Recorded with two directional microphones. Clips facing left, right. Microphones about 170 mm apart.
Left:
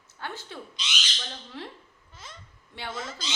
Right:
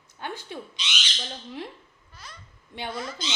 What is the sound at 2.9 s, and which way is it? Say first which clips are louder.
Speech: right 2 dB; 25° left (ahead or behind).